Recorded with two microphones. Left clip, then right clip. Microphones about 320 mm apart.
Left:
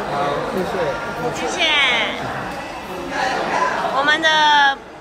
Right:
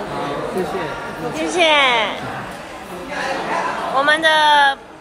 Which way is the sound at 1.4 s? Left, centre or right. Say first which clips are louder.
Right 3 dB; centre.